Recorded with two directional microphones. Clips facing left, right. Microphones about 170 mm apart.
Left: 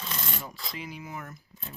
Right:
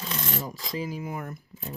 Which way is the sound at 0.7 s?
40° right (ahead or behind).